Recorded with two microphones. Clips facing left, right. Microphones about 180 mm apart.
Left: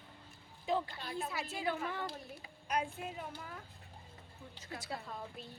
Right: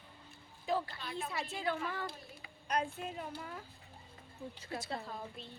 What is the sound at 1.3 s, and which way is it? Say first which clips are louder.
A woman's voice: right 2 dB; 5° left (ahead or behind).